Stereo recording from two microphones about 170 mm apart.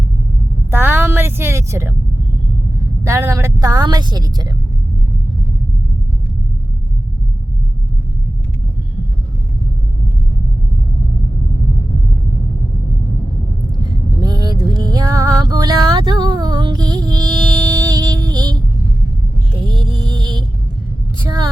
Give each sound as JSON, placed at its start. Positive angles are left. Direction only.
{"t": 0.7, "sound": "a sound", "side_deg": -10}
{"t": 3.0, "sound": "a woman's voice", "side_deg": -15}
{"t": 13.7, "sound": "music", "side_deg": -25}
{"t": 19.6, "sound": "music", "side_deg": -25}
{"t": 21.2, "sound": "vehicle", "side_deg": -25}